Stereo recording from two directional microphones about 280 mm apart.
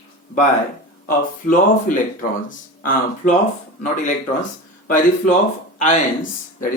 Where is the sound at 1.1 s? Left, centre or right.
Left.